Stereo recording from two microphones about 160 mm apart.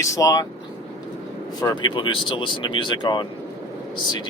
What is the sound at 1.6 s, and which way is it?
Speech, 25° left (ahead or behind).